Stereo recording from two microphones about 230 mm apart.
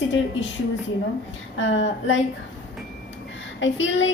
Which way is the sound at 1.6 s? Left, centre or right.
Left.